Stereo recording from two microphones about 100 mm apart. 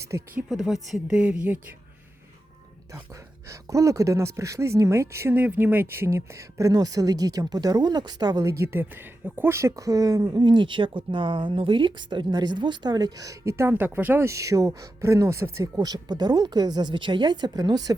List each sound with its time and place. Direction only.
0.1 s speech: 30° right (ahead or behind)
0.5 s speech: centre (ahead or behind)
3.5 s speech: 30° right (ahead or behind)
5.4 s speech: 15° right (ahead or behind)
15.8 s a woman's voice: 45° right (ahead or behind)